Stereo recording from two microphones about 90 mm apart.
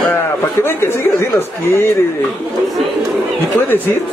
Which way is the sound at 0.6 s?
25° left (ahead or behind).